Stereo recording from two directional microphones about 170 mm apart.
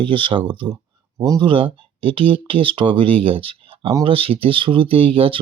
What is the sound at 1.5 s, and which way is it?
Speech, 30° right (ahead or behind).